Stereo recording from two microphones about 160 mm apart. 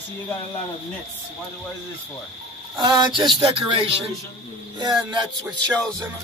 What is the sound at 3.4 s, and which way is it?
Speech, 35° right (ahead or behind).